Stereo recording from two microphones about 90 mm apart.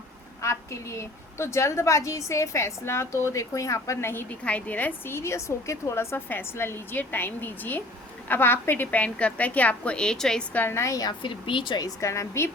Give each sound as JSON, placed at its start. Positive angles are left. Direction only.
{"t": 0.4, "sound": "a woman's voice", "side_deg": 30}
{"t": 4.1, "sound": "a woman's voice", "side_deg": 20}
{"t": 10.5, "sound": "a woman's voice", "side_deg": 25}
{"t": 11.2, "sound": "speech", "side_deg": 65}
{"t": 11.9, "sound": "a woman's voice", "side_deg": 35}